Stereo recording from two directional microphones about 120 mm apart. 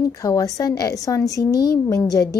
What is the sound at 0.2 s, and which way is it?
Speech, 30° left (ahead or behind).